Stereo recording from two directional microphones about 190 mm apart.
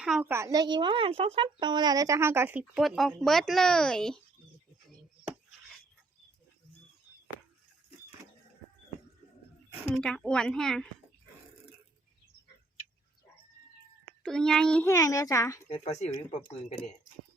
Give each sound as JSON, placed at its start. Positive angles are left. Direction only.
{"t": 0.0, "sound": "speech", "side_deg": -5}
{"t": 9.9, "sound": "a woman's voice", "side_deg": 5}
{"t": 14.2, "sound": "a child's voice", "side_deg": 5}
{"t": 15.8, "sound": "speech", "side_deg": 35}